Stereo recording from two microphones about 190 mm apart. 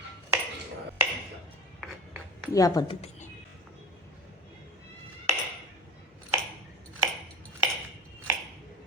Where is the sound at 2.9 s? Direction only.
35° left (ahead or behind).